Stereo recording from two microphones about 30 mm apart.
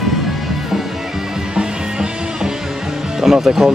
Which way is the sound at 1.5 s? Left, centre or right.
Right.